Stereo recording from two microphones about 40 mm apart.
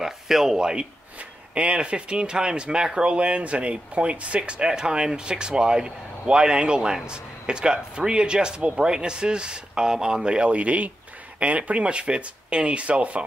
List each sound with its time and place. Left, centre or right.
0.0 s speech: centre
0.6 s speech: centre
1.5 s speech: right
10.5 s speech: right